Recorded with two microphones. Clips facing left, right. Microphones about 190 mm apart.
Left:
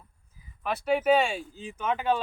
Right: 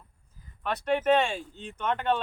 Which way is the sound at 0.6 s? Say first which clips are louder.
Left 1 dB; 5° left (ahead or behind).